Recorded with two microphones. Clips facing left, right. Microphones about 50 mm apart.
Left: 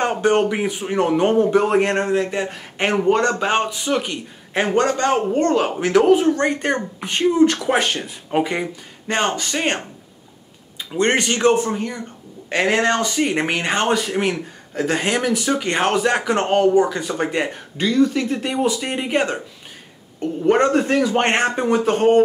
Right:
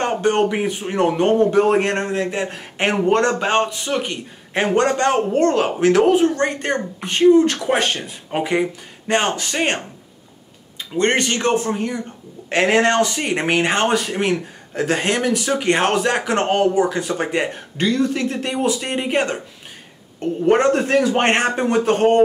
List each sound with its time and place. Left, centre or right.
0.0 s speech: centre
10.9 s speech: centre
11.7 s speech: centre